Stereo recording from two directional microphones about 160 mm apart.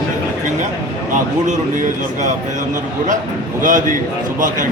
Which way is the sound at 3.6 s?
55° right (ahead or behind).